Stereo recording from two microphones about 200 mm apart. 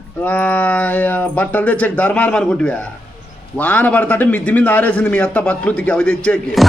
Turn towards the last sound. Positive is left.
turn(degrees=5)  # may be behind; listen again after turning